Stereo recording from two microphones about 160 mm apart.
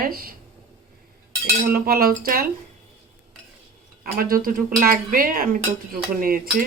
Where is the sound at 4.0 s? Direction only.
65° right (ahead or behind).